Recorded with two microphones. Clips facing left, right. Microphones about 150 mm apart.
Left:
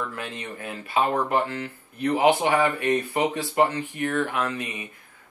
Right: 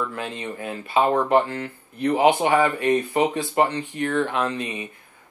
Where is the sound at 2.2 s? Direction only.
15° right (ahead or behind).